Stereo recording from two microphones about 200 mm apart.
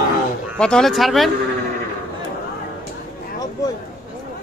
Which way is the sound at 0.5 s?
5° left (ahead or behind).